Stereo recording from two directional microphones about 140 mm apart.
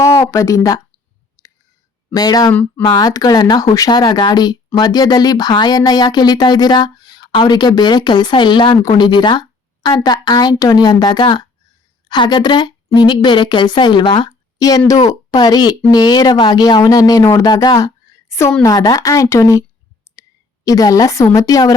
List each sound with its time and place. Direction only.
0.3 s speech: 20° left (ahead or behind)
2.1 s speech: 30° left (ahead or behind)
2.5 s speech: 15° left (ahead or behind)
2.8 s a woman's voice: 30° left (ahead or behind)
20.1 s clicking: 20° left (ahead or behind)
20.7 s speech: 25° left (ahead or behind)